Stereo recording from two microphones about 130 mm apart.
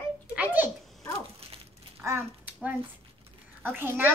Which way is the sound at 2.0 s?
20° right (ahead or behind).